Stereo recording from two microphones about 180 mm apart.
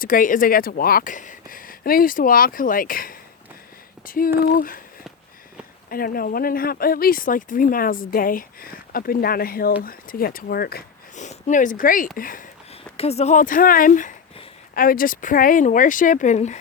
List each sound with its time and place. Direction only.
0.0 s speech: 50° left (ahead or behind)
5.9 s speech: 55° left (ahead or behind)
11.1 s speech: 40° left (ahead or behind)
13.0 s speech: 35° left (ahead or behind)